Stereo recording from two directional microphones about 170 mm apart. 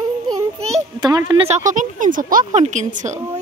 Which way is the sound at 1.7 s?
50° right (ahead or behind).